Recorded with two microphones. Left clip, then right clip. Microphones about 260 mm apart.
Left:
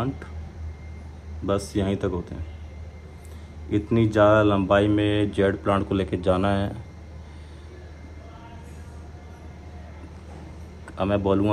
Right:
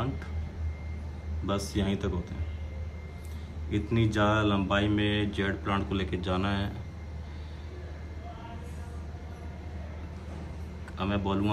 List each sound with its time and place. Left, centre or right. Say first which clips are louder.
1.4 s speech: left 7 dB; centre
3.7 s speech: left 8 dB; centre
11.0 s speech: left 9 dB; centre